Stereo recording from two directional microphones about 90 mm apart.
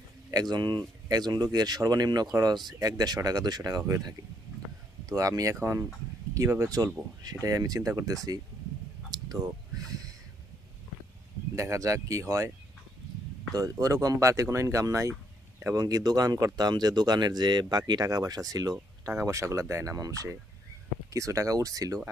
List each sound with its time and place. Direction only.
0.3 s speech: 45° right (ahead or behind)
5.1 s speech: 40° right (ahead or behind)
9.0 s a sound: 45° right (ahead or behind)
11.5 s speech: 35° right (ahead or behind)
13.5 s speech: 40° right (ahead or behind)